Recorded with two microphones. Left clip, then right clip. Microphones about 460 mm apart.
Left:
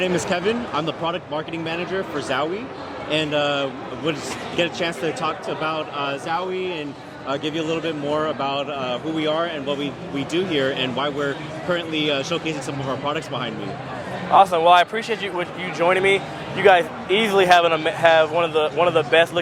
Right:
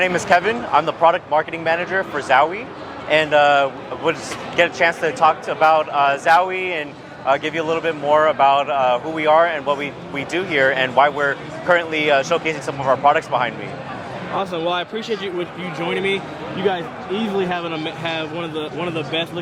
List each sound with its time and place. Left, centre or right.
0.0 s a man's voice: right
14.3 s a man's voice: left
15.9 s a man's voice: left
17.3 s a man's voice: left